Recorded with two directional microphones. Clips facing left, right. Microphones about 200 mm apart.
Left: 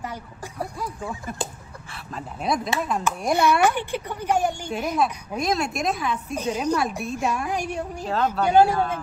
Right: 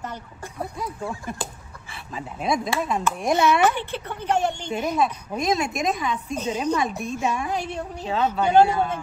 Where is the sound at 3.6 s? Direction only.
10° left (ahead or behind).